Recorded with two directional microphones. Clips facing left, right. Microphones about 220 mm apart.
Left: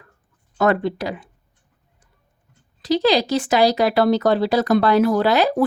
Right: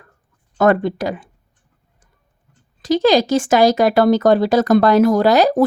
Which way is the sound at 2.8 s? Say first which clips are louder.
Right 4 dB; 45° right (ahead or behind).